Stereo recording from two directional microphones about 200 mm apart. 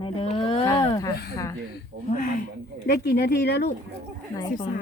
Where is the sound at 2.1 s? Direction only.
45° left (ahead or behind).